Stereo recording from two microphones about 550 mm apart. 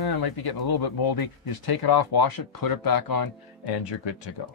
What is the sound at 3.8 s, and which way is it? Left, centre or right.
Speech, left.